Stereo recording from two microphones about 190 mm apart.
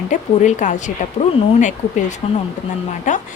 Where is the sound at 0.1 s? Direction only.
40° left (ahead or behind).